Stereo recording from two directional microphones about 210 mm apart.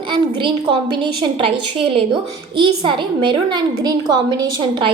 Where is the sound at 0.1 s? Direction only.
25° right (ahead or behind).